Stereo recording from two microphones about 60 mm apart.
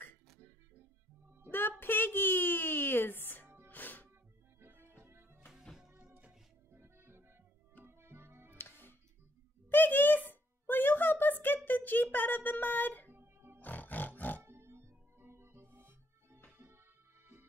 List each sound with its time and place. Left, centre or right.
1.5 s a sound: left
3.6 s music: left
4.6 s music: right
5.9 s music: right
6.7 s music: right
8.5 s music: left
9.7 s a sound: left
13.1 s music: right
13.6 s music: left
14.4 s music: right